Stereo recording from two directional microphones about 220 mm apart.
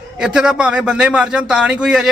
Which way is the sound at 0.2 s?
5° right (ahead or behind).